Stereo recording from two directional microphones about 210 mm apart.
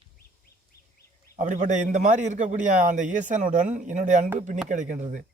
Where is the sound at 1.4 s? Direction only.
35° right (ahead or behind).